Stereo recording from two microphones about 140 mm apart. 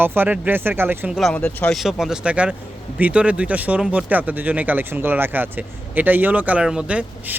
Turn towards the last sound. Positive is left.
turn(degrees=-10)  # may be behind; listen again after turning